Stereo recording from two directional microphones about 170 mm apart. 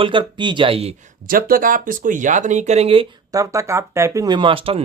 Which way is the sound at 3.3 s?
20° right (ahead or behind).